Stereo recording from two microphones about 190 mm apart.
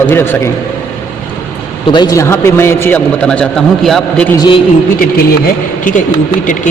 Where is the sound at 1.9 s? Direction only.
20° left (ahead or behind); by 4.3 s centre (ahead or behind).